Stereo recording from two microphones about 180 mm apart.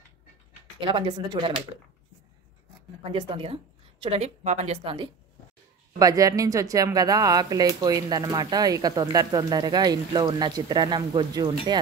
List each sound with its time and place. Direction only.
0.7 s speech: 25° right (ahead or behind)
3.0 s a woman's voice: 30° right (ahead or behind)